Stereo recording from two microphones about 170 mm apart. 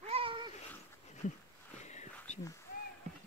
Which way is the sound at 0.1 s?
30° right (ahead or behind).